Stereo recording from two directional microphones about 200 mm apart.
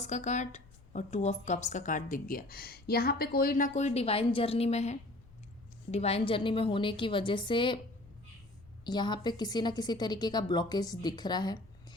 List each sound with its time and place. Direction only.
0.0 s a woman's voice: 35° left (ahead or behind)
8.8 s a woman's voice: 20° left (ahead or behind)